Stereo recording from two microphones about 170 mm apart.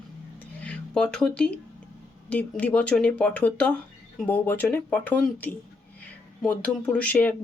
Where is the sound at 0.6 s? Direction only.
5° left (ahead or behind).